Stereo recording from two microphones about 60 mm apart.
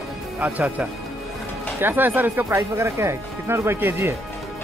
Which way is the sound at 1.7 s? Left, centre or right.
Right.